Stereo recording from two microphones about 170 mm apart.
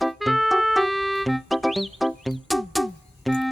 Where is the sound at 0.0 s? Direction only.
Centre (ahead or behind).